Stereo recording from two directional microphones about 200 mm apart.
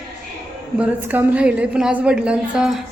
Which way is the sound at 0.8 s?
10° right (ahead or behind).